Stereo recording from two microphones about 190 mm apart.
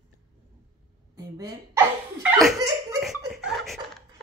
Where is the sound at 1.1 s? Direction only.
20° right (ahead or behind).